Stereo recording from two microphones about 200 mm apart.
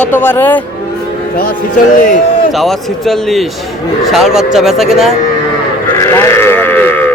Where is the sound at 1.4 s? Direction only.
40° left (ahead or behind).